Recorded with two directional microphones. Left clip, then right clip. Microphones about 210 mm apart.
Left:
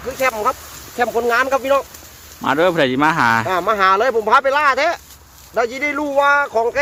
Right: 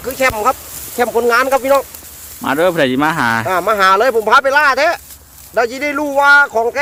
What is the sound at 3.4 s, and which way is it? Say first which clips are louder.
Speech: right 3 dB; 20° right (ahead or behind).